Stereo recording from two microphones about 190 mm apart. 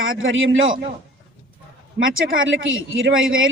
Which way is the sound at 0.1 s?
90° right.